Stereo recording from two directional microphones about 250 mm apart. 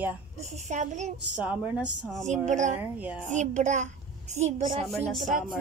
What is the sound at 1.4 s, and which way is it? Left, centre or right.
Speech, centre.